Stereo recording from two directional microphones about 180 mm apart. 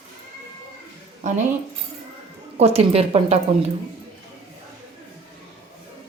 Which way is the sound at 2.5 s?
35° right (ahead or behind).